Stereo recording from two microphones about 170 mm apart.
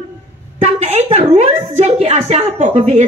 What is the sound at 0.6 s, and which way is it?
A woman's voice, 40° right (ahead or behind).